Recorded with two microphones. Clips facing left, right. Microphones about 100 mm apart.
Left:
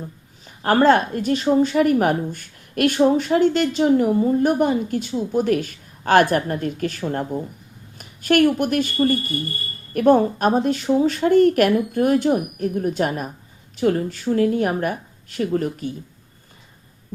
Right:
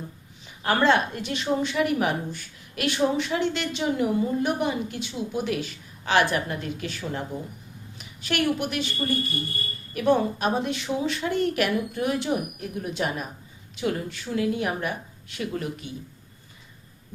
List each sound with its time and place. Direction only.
0.4 s a woman's voice: 45° left (ahead or behind)